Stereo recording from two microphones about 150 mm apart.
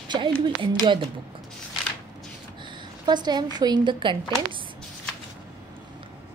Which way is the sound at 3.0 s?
30° right (ahead or behind).